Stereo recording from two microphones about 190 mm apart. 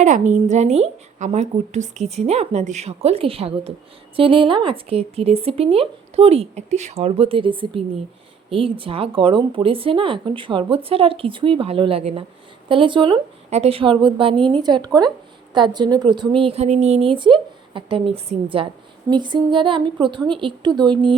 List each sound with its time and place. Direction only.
0.0 s a woman's voice: 40° right (ahead or behind)